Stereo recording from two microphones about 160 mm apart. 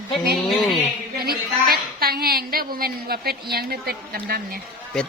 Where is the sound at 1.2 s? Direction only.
70° right (ahead or behind).